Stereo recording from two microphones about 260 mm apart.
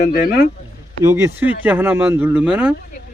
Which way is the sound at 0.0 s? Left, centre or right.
Left.